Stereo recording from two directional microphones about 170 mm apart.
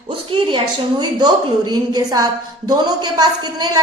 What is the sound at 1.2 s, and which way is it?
A woman's voice, 25° right (ahead or behind).